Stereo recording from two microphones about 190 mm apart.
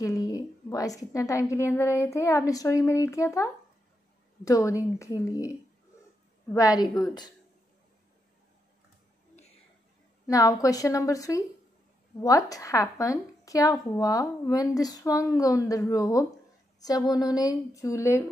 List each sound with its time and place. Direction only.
0.0 s a woman's voice: 15° left (ahead or behind)
10.2 s a woman's voice: 20° left (ahead or behind)